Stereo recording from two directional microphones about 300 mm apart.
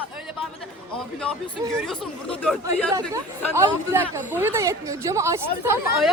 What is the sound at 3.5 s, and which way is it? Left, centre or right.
Speech, centre.